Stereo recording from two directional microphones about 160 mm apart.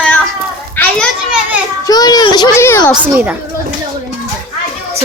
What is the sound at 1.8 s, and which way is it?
A child's voice, 25° left (ahead or behind).